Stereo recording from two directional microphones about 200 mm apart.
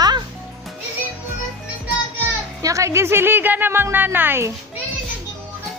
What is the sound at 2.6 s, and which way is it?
Speech, 15° right (ahead or behind).